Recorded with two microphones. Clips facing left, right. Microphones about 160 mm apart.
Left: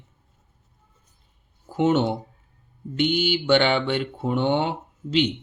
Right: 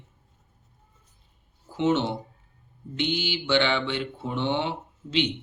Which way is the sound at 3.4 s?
45° left (ahead or behind).